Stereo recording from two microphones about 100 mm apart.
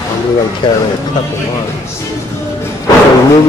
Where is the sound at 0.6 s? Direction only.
45° left (ahead or behind).